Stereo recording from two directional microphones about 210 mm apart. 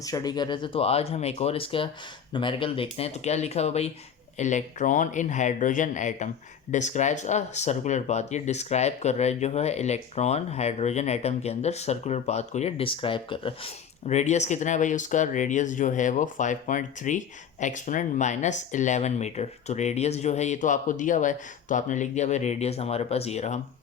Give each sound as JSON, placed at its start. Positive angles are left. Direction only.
{"t": 0.0, "sound": "speech", "side_deg": 15}